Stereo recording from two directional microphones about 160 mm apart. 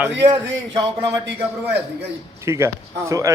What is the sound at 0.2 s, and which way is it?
Speech, 30° right (ahead or behind).